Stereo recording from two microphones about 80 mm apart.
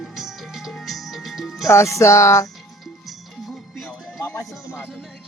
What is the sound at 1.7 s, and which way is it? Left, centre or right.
Speech, left.